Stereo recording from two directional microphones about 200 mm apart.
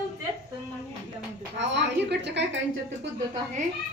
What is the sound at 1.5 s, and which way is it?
A woman's voice, 60° right (ahead or behind).